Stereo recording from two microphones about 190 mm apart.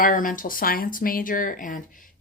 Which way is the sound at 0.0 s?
45° left (ahead or behind).